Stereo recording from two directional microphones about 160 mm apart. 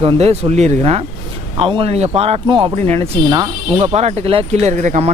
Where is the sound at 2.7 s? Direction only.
40° right (ahead or behind).